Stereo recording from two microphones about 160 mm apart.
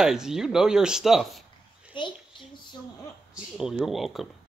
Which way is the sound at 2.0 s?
30° left (ahead or behind).